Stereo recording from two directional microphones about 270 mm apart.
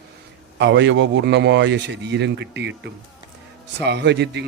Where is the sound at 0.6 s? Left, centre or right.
Right.